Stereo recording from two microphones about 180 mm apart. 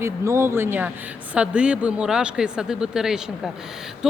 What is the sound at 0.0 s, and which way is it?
A woman's voice, 15° right (ahead or behind).